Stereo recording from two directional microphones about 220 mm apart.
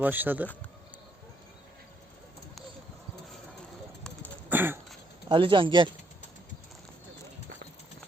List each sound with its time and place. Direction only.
0.0 s speech: 10° right (ahead or behind)
4.4 s a sound: 10° right (ahead or behind)
5.3 s speech: 20° right (ahead or behind)